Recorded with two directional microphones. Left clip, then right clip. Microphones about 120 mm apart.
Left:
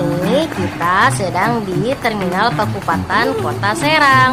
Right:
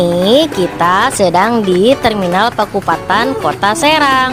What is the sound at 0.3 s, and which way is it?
Speech, 90° right.